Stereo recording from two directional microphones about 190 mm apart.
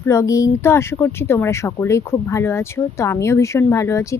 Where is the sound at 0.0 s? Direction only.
15° left (ahead or behind).